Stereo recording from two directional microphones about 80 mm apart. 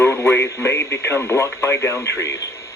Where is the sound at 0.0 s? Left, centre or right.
Left.